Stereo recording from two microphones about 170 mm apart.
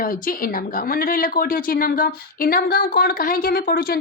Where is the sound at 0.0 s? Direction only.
55° left (ahead or behind).